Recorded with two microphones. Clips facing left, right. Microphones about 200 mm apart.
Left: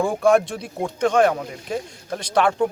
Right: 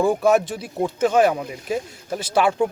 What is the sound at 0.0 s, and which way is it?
Speech, 5° right (ahead or behind).